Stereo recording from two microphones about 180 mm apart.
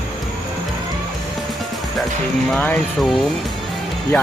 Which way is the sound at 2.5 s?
5° left (ahead or behind).